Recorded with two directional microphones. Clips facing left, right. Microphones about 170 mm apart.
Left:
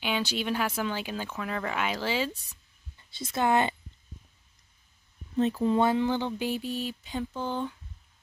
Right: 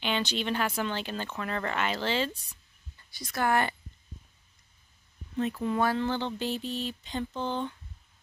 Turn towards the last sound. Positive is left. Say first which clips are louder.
# even
turn(degrees=5)  # may be behind; listen again after turning